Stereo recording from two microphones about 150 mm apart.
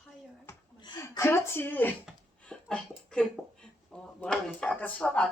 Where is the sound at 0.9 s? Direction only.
20° left (ahead or behind).